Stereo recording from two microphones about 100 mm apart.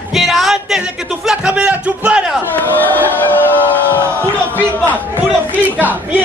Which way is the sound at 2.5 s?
20° left (ahead or behind).